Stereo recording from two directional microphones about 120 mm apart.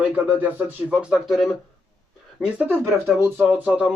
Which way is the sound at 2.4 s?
15° right (ahead or behind).